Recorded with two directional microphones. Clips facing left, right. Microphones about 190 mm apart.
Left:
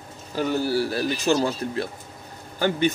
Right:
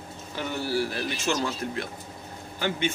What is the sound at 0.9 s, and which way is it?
A man's voice, 35° left (ahead or behind).